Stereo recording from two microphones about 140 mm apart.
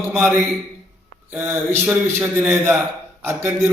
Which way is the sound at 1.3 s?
10° right (ahead or behind).